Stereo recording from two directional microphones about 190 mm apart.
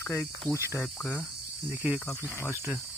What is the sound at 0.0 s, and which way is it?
Speech, 10° left (ahead or behind).